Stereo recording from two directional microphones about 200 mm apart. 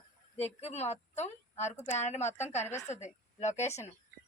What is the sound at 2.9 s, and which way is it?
Speech, 35° left (ahead or behind).